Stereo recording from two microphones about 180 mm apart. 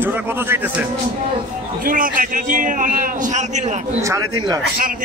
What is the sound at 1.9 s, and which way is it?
A man's voice, 50° right (ahead or behind).